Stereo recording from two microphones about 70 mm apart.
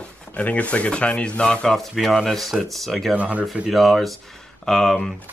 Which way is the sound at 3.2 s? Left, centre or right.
Right.